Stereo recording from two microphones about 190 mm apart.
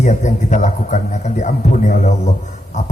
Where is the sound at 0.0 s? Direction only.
40° left (ahead or behind).